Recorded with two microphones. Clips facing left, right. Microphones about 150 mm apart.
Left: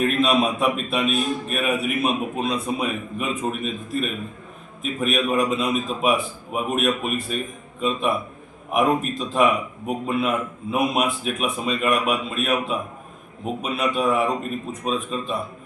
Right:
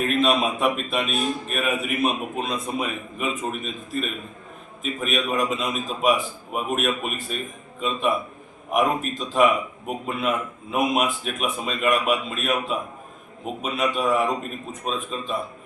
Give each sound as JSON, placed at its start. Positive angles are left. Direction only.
{"t": 0.1, "sound": "a man's voice", "side_deg": 0}